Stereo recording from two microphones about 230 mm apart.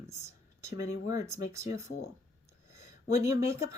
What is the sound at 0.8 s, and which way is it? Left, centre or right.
Speech, left.